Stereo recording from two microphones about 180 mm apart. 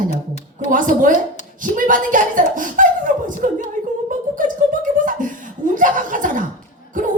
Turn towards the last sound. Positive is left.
turn(degrees=-45)  # may be behind; listen again after turning